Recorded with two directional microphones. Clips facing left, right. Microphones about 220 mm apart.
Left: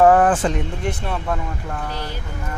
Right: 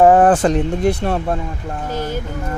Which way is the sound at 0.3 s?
40° right (ahead or behind).